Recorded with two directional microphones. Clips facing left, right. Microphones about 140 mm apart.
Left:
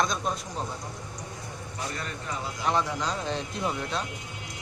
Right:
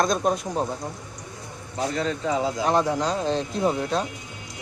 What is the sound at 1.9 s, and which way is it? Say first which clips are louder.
Speech: right 13 dB; 90° right.